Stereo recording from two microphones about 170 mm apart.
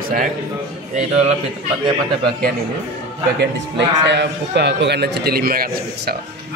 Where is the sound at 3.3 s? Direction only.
90° right; by 6.1 s 60° right (ahead or behind).